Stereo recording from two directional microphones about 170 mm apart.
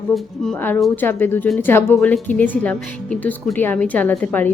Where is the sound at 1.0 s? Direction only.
10° left (ahead or behind).